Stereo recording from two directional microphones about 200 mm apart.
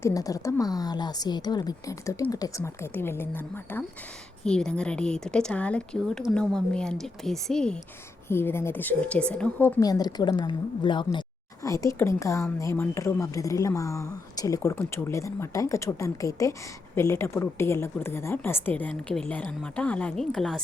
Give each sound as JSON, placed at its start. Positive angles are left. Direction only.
{"t": 0.0, "sound": "a woman's voice", "side_deg": 15}